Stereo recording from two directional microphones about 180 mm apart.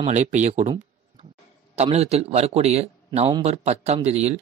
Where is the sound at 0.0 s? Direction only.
40° right (ahead or behind).